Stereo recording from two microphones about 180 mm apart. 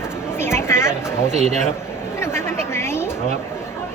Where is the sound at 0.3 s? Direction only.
15° left (ahead or behind).